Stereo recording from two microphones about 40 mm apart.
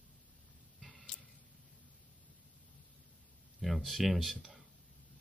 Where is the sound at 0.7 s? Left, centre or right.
Centre.